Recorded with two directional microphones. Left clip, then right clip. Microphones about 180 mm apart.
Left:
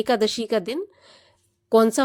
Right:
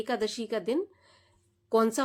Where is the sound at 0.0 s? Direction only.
50° left (ahead or behind).